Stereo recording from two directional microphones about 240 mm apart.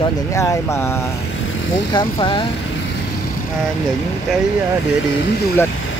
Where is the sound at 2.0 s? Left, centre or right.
Centre.